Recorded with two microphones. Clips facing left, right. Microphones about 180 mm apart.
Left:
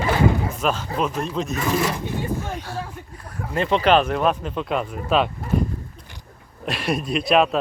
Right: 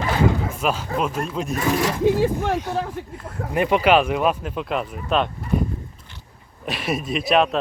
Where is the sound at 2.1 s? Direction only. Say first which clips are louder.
Right 7 dB; 85° right.